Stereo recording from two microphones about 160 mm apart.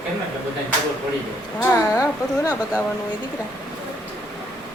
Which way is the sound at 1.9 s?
20° left (ahead or behind).